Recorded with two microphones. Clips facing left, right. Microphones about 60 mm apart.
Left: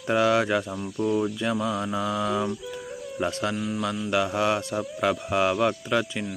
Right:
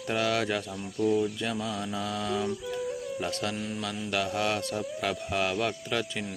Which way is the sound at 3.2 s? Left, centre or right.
Left.